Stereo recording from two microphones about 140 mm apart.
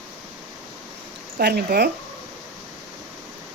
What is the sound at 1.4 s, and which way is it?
Speech, 90° right.